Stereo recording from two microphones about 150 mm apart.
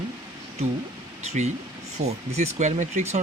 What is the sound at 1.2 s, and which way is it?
Speech, 50° right (ahead or behind).